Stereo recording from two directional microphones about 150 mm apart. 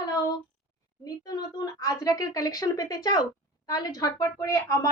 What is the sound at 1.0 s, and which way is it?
A woman's voice, 25° left (ahead or behind).